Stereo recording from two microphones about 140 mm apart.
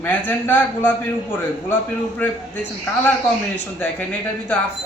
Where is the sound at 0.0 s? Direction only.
15° left (ahead or behind).